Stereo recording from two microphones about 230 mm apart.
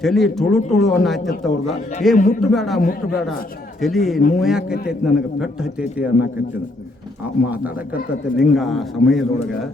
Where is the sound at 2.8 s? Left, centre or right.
Left.